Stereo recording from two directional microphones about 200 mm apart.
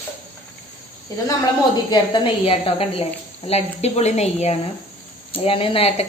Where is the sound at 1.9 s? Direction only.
20° left (ahead or behind).